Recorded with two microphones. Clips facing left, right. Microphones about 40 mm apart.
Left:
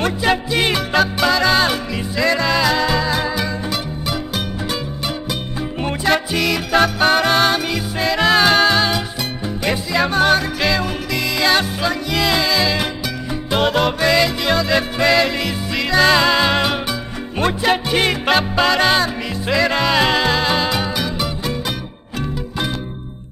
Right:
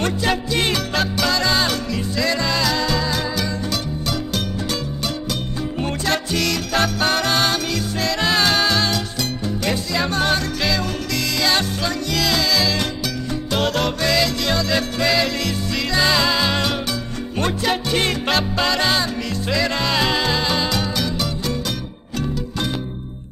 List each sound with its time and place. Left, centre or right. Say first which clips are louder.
0.0 s music: left 3 dB; centre
5.8 s music: left 5 dB; centre